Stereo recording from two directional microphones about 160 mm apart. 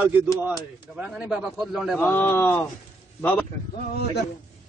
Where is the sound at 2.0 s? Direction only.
10° left (ahead or behind).